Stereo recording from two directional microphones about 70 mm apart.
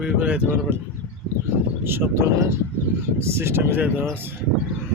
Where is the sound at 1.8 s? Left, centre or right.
Right.